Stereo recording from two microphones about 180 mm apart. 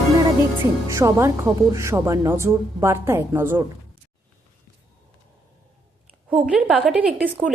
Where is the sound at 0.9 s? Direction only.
15° right (ahead or behind).